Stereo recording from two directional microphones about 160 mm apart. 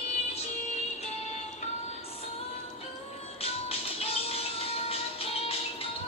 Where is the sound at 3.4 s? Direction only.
40° left (ahead or behind).